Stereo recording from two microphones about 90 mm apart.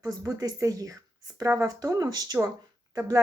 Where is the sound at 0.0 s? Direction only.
40° right (ahead or behind).